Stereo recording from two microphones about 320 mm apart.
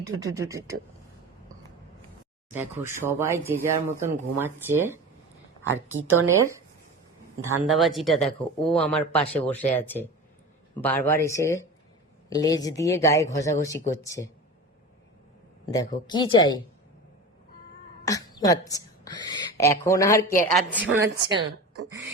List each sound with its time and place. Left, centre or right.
0.2 s speech: centre
2.5 s speech: centre
5.6 s a woman's voice: right
6.2 s speech: centre
7.6 s speech: centre
15.9 s speech: centre
18.0 s a woman's voice: centre
20.9 s speech: centre
21.8 s a sound: right